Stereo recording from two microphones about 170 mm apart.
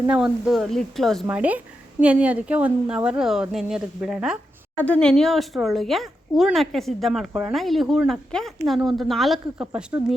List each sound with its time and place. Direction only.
0.1 s speech: 5° right (ahead or behind)
1.4 s speech: 10° right (ahead or behind)
4.8 s speech: 5° left (ahead or behind)